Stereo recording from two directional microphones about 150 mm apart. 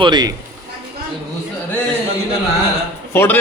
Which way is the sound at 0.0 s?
30° right (ahead or behind).